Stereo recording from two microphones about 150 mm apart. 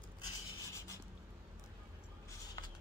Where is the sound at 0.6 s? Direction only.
20° left (ahead or behind).